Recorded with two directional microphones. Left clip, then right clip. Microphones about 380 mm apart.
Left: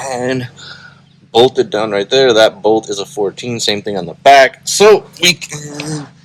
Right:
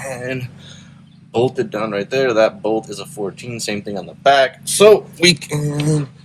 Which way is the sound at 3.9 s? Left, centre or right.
Centre.